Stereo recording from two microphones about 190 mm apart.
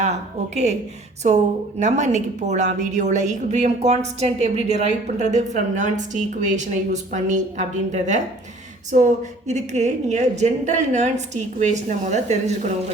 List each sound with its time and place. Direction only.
0.0 s a woman's voice: 35° right (ahead or behind)
1.8 s a woman's voice: 40° right (ahead or behind)
8.9 s a sound: 40° right (ahead or behind)
9.5 s a woman's voice: 35° right (ahead or behind)